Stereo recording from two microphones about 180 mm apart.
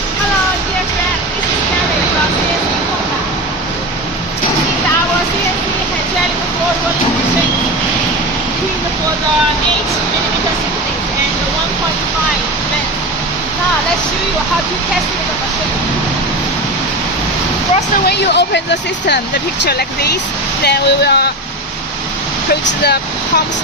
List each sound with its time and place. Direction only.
18.0 s speech: 70° left (ahead or behind)
19.6 s speech: 65° left (ahead or behind)